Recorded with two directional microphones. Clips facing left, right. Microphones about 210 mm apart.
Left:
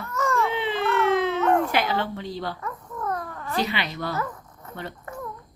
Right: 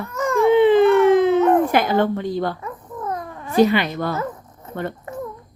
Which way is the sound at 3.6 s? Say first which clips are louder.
Right 13 dB; 50° right (ahead or behind).